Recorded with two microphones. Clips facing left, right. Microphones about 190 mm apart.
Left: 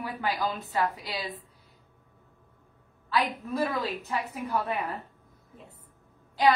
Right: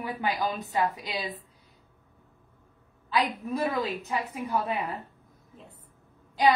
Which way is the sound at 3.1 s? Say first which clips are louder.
Right 1 dB; 15° right (ahead or behind).